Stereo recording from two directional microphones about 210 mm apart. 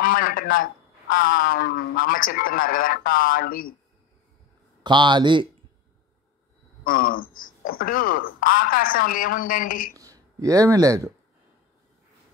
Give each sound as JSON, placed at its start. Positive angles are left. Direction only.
{"t": 0.0, "sound": "speech", "side_deg": 40}
{"t": 4.8, "sound": "speech", "side_deg": -20}
{"t": 6.8, "sound": "speech", "side_deg": 40}
{"t": 9.9, "sound": "speech", "side_deg": -15}